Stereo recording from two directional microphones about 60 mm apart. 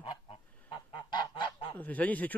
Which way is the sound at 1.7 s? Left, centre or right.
Left.